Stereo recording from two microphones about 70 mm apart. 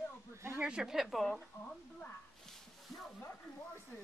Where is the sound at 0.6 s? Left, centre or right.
Centre.